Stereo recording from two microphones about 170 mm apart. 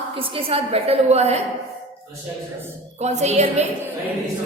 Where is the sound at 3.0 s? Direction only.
40° right (ahead or behind).